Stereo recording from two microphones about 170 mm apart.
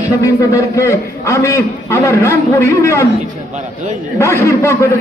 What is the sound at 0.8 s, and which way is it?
A man's voice, 15° left (ahead or behind).